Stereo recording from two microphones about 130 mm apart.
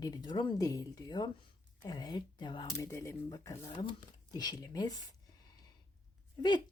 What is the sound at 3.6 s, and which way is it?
Speech, 40° left (ahead or behind).